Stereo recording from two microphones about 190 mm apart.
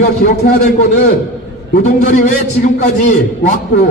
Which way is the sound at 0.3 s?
45° left (ahead or behind).